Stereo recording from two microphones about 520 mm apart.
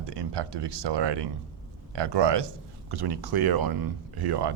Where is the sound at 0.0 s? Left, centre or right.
Right.